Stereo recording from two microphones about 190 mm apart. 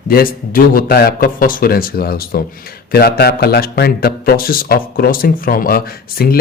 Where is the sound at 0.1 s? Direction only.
50° left (ahead or behind).